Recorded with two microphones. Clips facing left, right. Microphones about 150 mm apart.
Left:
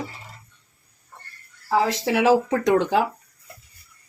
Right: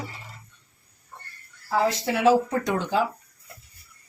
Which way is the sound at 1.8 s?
90° left.